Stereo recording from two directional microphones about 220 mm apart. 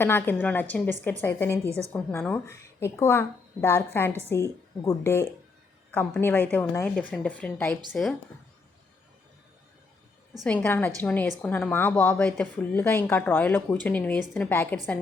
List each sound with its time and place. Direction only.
0.0 s speech: 10° left (ahead or behind)
10.4 s speech: 5° left (ahead or behind)